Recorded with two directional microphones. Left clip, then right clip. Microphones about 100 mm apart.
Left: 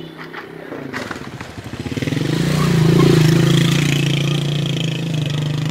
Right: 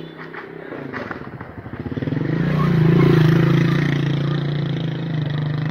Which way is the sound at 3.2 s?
40° right (ahead or behind).